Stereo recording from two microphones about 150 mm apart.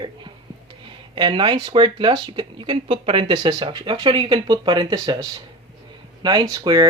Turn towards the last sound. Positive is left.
turn(degrees=-25)  # may be behind; listen again after turning